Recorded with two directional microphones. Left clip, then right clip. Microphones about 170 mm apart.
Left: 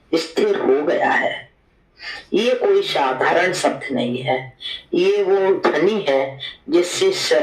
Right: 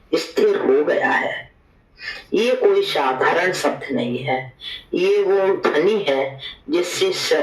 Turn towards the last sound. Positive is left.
turn(degrees=40)  # may be behind; listen again after turning